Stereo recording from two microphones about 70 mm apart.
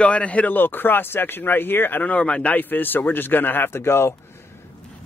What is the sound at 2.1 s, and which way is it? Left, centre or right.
Speech, centre.